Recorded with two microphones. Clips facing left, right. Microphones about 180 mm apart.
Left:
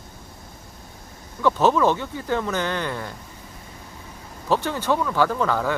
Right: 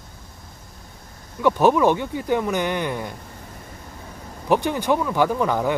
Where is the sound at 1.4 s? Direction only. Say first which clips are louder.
Right 2 dB; 15° right (ahead or behind).